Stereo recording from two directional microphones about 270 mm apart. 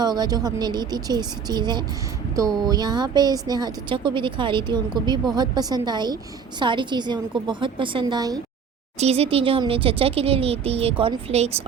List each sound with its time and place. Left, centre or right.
0.0 s a woman's voice: centre